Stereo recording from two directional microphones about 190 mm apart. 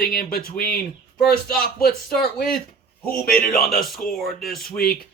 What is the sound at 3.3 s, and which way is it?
Speech, 50° left (ahead or behind).